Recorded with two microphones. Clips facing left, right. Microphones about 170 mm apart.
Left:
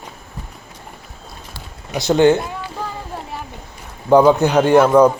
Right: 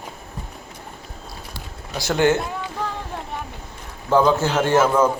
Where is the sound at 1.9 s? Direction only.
20° left (ahead or behind).